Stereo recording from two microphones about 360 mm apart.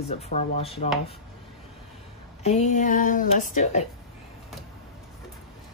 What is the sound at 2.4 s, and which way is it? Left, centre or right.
Speech, centre.